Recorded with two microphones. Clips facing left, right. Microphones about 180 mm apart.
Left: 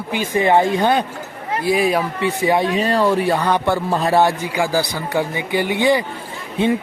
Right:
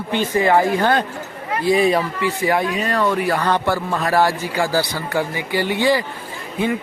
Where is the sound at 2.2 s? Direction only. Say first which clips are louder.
Left 2 dB; 20° left (ahead or behind).